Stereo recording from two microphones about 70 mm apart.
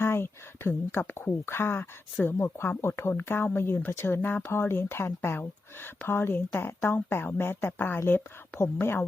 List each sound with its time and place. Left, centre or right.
0.0 s speech: left